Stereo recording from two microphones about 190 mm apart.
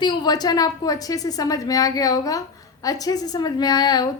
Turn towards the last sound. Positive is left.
turn(degrees=20)  # may be behind; listen again after turning